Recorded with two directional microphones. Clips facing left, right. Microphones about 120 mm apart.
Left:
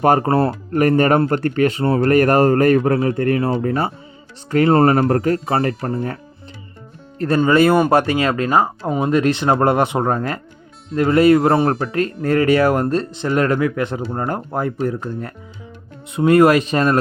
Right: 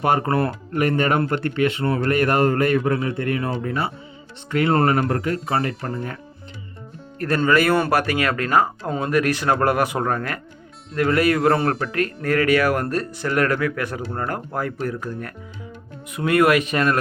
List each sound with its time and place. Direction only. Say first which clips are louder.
0.0 s a man's voice: left 5 dB; 35° left (ahead or behind)
0.7 s a man's voice: left 6 dB; 40° left (ahead or behind)
7.2 s a man's voice: left 5 dB; 25° left (ahead or behind)